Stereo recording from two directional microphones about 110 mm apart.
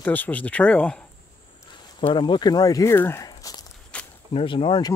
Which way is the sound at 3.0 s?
20° left (ahead or behind).